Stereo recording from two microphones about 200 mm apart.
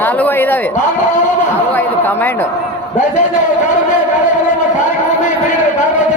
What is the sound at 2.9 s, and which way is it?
Speech, 40° left (ahead or behind).